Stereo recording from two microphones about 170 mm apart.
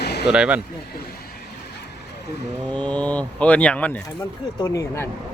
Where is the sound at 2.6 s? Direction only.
10° left (ahead or behind).